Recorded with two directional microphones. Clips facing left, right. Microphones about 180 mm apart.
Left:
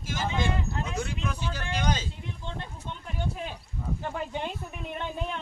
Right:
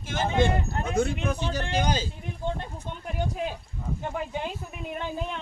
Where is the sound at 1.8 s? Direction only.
35° right (ahead or behind).